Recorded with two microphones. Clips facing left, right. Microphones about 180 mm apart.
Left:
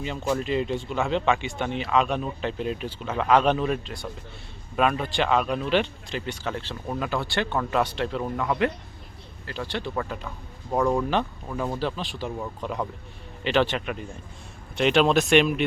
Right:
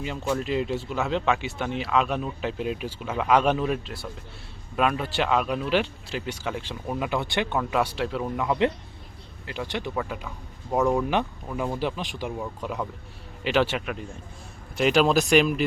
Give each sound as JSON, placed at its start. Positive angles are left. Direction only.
{"t": 0.0, "sound": "speech", "side_deg": 0}
{"t": 8.4, "sound": "speech", "side_deg": -20}